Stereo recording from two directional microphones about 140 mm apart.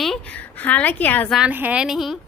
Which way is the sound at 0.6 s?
10° left (ahead or behind).